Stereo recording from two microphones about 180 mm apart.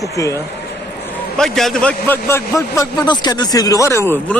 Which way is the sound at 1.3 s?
5° left (ahead or behind).